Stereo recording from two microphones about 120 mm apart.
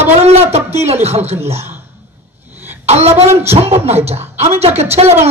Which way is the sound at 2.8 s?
65° right (ahead or behind).